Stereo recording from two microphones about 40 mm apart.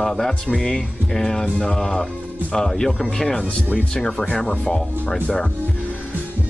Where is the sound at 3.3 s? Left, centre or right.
Left.